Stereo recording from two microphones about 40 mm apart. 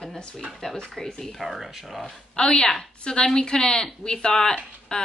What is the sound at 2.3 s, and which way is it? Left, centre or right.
Speech, left.